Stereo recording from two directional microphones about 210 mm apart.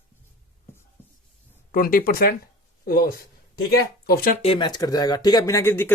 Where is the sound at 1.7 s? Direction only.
40° left (ahead or behind).